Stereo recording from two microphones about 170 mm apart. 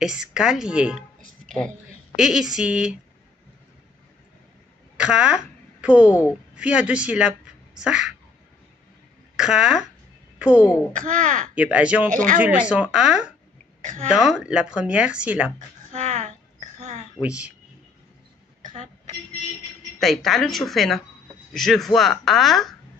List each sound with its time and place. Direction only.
0.0 s speech: 5° right (ahead or behind)
2.1 s speech: 5° right (ahead or behind)
4.9 s a woman's voice: 5° right (ahead or behind)
9.4 s speech: 5° right (ahead or behind)
10.9 s a child's voice: 50° right (ahead or behind)
11.5 s a woman's voice: 10° right (ahead or behind)
13.7 s a sound: 45° right (ahead or behind)
14.0 s a woman's voice: 5° right (ahead or behind)
15.9 s a sound: 45° right (ahead or behind)
17.2 s a woman's voice: 5° right (ahead or behind)
20.0 s speech: centre (ahead or behind)